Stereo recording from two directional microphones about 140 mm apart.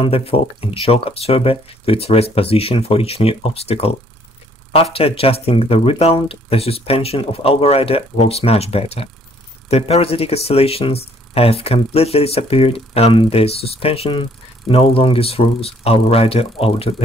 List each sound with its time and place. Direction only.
0.0 s speech: 45° left (ahead or behind)
4.9 s speech: 45° left (ahead or behind)